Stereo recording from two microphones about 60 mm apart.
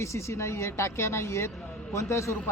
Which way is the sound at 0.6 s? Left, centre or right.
Left.